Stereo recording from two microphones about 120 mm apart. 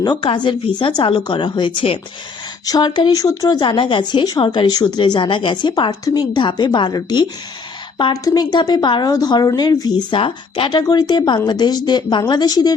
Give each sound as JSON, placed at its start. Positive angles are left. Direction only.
{"t": 0.0, "sound": "a woman's voice", "side_deg": 35}